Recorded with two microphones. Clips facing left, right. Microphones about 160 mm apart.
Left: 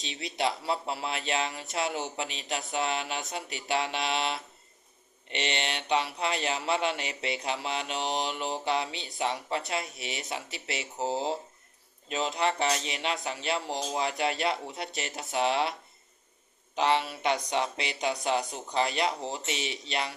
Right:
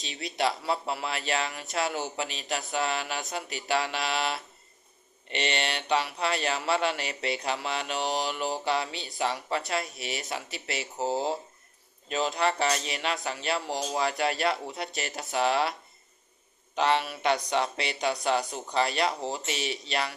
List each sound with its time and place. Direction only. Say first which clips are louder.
0.0 s speech: right 2 dB; 25° left (ahead or behind)
12.0 s speech: right 2 dB; 20° left (ahead or behind)
16.8 s speech: right 1 dB; 20° left (ahead or behind)